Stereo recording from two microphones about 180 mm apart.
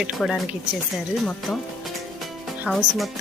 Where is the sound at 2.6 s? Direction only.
Centre (ahead or behind).